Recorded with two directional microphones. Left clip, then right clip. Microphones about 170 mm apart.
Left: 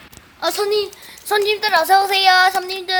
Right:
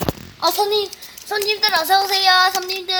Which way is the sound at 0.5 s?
25° left (ahead or behind).